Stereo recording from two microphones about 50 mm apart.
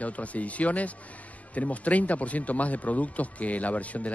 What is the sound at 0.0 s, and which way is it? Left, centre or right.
Speech, left.